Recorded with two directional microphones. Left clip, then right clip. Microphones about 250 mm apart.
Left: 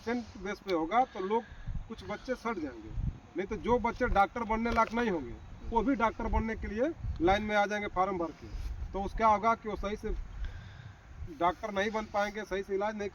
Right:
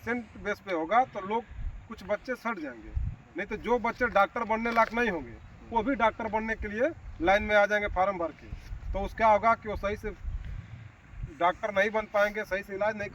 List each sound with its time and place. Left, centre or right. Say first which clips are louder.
0.0 s speech: right 3 dB; centre
11.3 s speech: right 5 dB; centre